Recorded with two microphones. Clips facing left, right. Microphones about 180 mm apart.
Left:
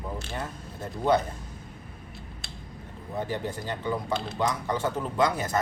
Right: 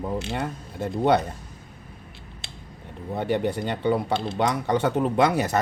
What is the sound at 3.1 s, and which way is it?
Speech, 70° right (ahead or behind).